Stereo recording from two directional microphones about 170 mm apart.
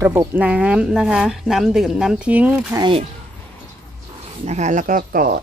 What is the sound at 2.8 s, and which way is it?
Speech, 30° right (ahead or behind).